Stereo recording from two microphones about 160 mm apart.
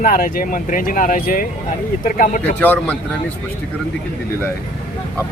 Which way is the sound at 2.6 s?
10° left (ahead or behind).